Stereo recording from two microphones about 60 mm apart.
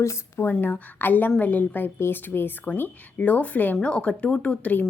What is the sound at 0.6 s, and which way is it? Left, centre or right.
A woman's voice, left.